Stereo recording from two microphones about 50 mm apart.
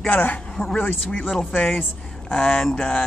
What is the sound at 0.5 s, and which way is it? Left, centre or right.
Speech, centre.